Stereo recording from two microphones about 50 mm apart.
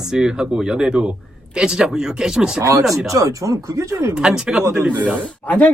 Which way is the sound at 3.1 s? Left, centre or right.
Right.